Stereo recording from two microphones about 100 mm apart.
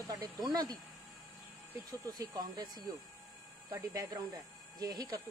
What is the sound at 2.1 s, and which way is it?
Speech, 40° right (ahead or behind).